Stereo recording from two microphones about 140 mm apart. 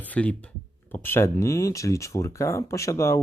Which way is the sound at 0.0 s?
10° left (ahead or behind).